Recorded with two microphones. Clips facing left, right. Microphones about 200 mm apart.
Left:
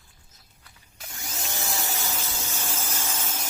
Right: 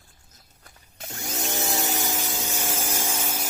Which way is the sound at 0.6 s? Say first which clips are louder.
Right 6 dB; 45° right (ahead or behind).